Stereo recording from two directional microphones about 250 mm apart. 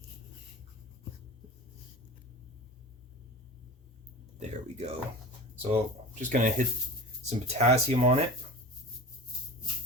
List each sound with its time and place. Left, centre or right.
4.4 s speech: right